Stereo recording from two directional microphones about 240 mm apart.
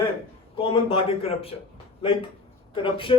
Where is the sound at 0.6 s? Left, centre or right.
Left.